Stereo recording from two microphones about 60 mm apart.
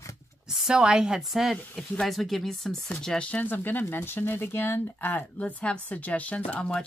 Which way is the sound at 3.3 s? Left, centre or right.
Left.